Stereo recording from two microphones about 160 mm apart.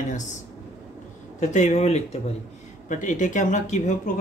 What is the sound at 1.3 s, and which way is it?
Speech, 50° left (ahead or behind).